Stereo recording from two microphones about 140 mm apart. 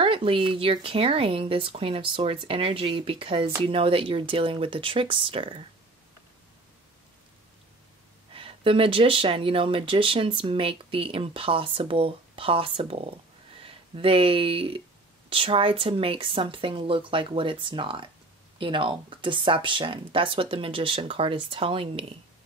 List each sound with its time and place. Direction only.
0.0 s speech: 40° right (ahead or behind)
8.3 s speech: 40° right (ahead or behind)